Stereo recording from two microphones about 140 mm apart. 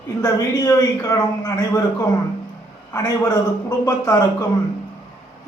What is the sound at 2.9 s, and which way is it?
A man's voice, 25° left (ahead or behind).